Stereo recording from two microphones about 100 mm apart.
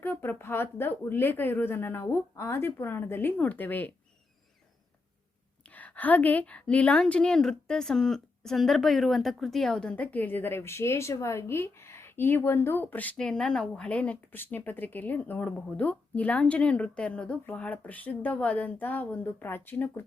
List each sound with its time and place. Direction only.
0.0 s speech: 20° left (ahead or behind)
5.6 s a woman's voice: 15° left (ahead or behind)